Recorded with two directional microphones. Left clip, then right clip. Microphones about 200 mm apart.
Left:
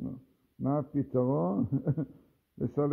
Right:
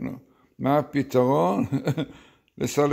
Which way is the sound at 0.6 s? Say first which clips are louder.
Right 9 dB; 20° right (ahead or behind).